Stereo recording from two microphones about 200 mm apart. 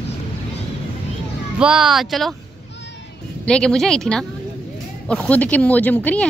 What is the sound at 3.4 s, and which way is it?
A woman's voice, 5° left (ahead or behind).